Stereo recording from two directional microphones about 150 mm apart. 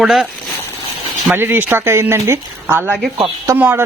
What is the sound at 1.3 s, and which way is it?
Speech, 15° right (ahead or behind).